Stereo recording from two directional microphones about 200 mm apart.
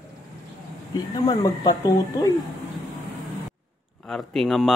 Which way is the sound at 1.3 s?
15° left (ahead or behind).